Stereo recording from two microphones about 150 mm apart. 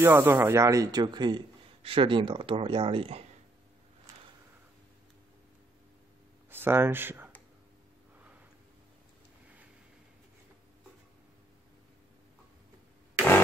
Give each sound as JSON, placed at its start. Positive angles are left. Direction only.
{"t": 0.0, "sound": "a man's voice", "side_deg": -15}
{"t": 6.5, "sound": "speech", "side_deg": -15}